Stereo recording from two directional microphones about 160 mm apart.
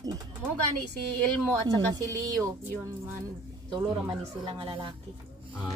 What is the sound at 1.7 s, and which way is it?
Speech, 20° right (ahead or behind).